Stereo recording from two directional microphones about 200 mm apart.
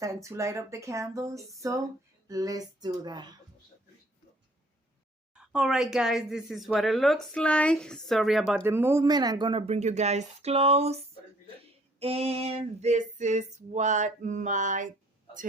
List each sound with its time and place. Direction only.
0.0 s speech: 15° right (ahead or behind)
5.3 s speech: 5° right (ahead or behind)
8.6 s speech: 10° right (ahead or behind); by 11.0 s 30° right (ahead or behind)
11.9 s female singing: 30° right (ahead or behind)